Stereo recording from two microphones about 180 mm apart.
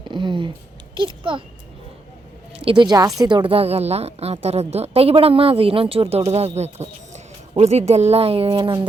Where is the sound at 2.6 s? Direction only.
25° right (ahead or behind).